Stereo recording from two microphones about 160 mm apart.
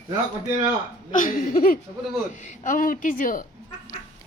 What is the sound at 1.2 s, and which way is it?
A woman's voice, 60° left (ahead or behind).